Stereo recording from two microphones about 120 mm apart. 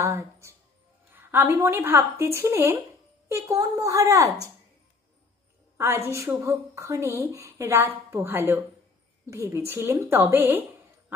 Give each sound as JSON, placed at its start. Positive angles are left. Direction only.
{"t": 0.0, "sound": "a woman's voice", "side_deg": -25}
{"t": 5.7, "sound": "a woman's voice", "side_deg": -20}